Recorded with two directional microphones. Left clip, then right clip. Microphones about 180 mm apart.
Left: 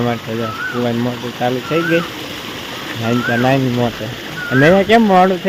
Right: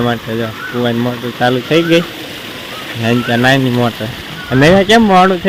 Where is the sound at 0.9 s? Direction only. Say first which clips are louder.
Right 3 dB; 15° right (ahead or behind).